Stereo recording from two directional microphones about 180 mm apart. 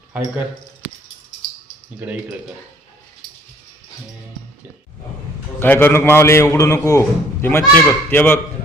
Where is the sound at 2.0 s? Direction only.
10° right (ahead or behind).